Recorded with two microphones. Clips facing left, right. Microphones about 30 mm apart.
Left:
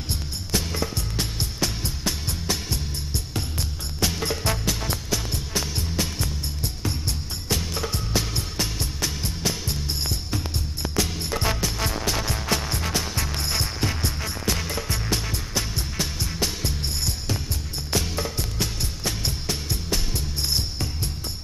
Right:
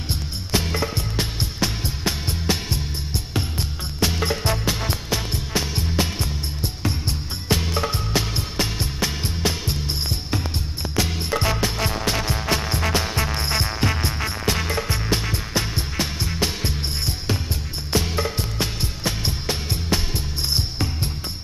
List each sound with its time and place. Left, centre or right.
0.1 s music: right
11.0 s music: right